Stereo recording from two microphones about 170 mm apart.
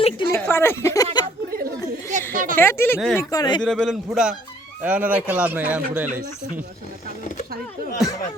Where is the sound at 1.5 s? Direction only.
60° right (ahead or behind).